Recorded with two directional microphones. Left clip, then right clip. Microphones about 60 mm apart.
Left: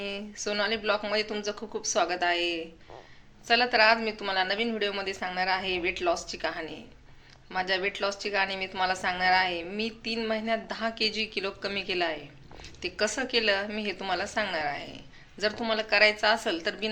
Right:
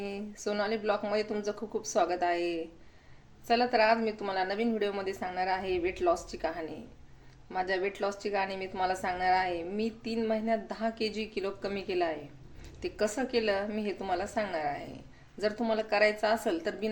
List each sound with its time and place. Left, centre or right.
0.3 s a woman's voice: right
2.0 s a woman's voice: right
12.8 s a woman's voice: right